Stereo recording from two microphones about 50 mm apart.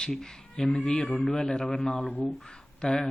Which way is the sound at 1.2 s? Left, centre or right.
Centre.